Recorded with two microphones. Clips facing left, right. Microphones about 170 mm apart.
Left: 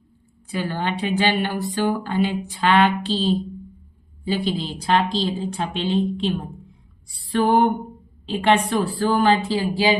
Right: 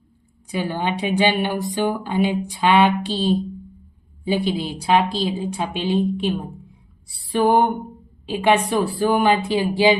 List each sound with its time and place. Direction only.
0.4 s a woman's voice: 15° right (ahead or behind)
7.3 s a woman's voice: 10° right (ahead or behind)